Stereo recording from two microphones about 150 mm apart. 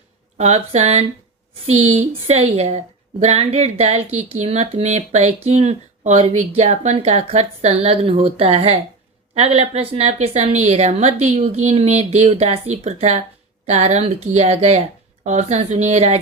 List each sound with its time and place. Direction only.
0.3 s a woman's voice: 50° right (ahead or behind)